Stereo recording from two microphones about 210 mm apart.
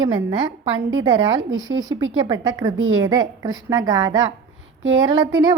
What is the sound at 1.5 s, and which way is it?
Speech, 65° right (ahead or behind).